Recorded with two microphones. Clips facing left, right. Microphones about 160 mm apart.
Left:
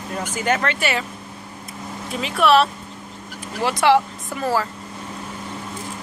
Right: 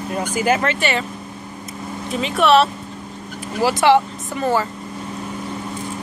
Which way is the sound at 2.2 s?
Centre (ahead or behind).